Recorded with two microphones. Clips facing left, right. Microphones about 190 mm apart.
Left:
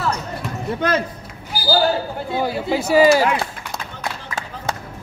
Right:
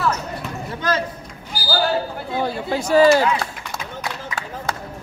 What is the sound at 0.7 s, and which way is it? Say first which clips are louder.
Speech: left 2 dB; 60° left (ahead or behind).